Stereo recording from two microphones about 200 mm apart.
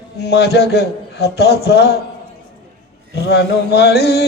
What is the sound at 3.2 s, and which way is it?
A man's voice, 55° left (ahead or behind).